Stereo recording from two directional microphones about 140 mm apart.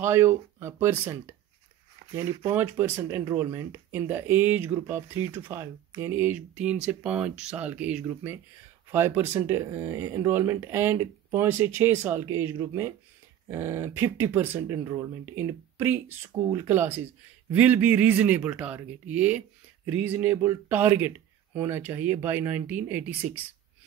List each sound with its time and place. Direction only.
0.0 s speech: 20° right (ahead or behind)
2.5 s speech: 15° right (ahead or behind)